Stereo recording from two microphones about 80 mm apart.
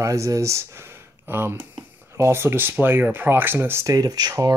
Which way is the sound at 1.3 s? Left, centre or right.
Right.